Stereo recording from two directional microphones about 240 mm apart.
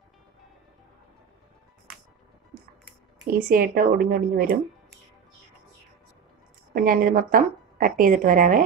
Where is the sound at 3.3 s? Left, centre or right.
Right.